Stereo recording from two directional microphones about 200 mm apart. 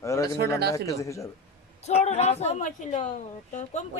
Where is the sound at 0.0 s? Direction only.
15° left (ahead or behind).